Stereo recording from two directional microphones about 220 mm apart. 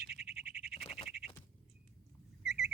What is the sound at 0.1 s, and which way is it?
Frog, centre (ahead or behind).